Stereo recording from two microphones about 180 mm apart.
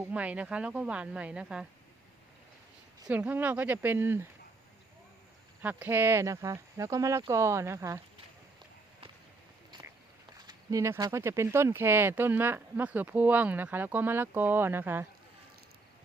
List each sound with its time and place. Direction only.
0.1 s speech: 5° right (ahead or behind)
3.1 s speech: 10° right (ahead or behind)
5.6 s speech: 10° right (ahead or behind)
10.4 s speech: 20° right (ahead or behind)